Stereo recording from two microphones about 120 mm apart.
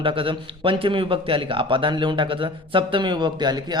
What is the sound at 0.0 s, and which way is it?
A man's voice, 45° right (ahead or behind).